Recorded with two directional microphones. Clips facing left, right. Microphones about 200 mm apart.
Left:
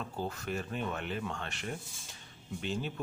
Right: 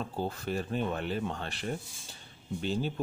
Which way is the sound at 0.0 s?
30° right (ahead or behind).